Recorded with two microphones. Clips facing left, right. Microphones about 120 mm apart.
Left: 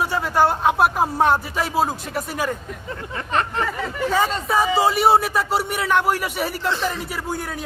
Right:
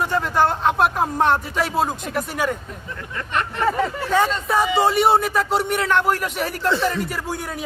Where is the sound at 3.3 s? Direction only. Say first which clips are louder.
Left 3 dB; 35° left (ahead or behind).